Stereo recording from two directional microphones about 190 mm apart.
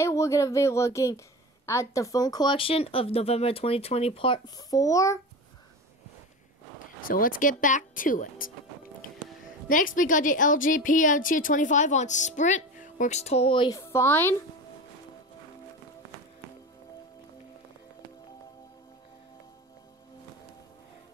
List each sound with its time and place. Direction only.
0.0 s speech: 15° left (ahead or behind)
7.0 s a woman's voice: 45° left (ahead or behind)
9.0 s music: 45° left (ahead or behind)
9.7 s a woman's voice: 45° left (ahead or behind); by 13.7 s 25° left (ahead or behind)
13.7 s speech: 15° left (ahead or behind)